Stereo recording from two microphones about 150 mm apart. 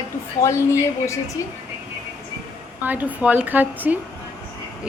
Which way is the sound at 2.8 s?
10° right (ahead or behind).